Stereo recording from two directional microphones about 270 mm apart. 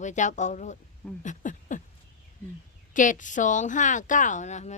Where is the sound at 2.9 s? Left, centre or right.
Left.